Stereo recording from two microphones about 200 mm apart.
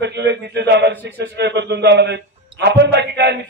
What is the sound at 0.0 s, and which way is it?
A man's voice, 60° right (ahead or behind).